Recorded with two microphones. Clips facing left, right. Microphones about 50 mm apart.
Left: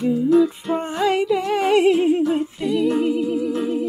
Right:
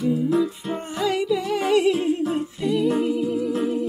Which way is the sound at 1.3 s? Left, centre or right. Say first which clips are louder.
Left 3 dB; left.